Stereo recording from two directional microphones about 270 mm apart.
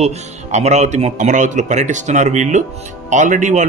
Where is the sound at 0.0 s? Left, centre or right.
Right.